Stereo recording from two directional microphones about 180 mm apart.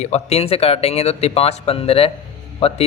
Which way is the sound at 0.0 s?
35° left (ahead or behind).